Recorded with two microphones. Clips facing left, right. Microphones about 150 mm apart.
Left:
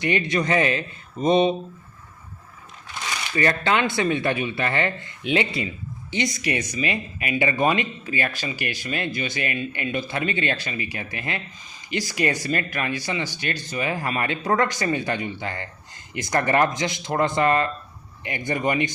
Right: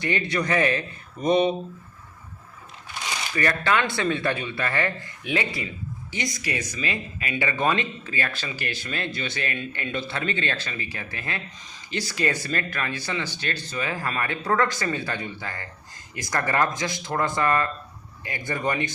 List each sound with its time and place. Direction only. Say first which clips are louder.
0.0 s speech: left 3 dB; 20° left (ahead or behind)
3.3 s speech: left 2 dB; 25° left (ahead or behind)